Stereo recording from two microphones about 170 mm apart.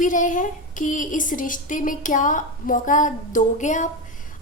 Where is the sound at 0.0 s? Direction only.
50° left (ahead or behind).